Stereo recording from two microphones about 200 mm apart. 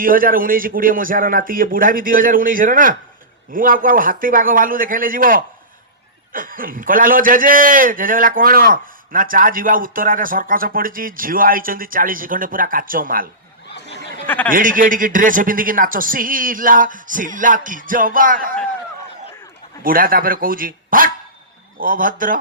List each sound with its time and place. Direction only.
0.0 s a man's voice: 45° right (ahead or behind)
14.3 s a man's voice: 10° left (ahead or behind)
14.5 s a man's voice: 45° right (ahead or behind)
19.8 s a man's voice: 45° right (ahead or behind)